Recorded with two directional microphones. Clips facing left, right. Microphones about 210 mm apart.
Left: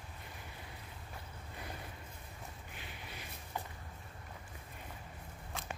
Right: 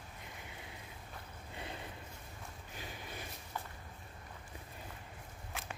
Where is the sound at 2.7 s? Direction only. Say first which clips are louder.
Right 3 dB; 40° right (ahead or behind).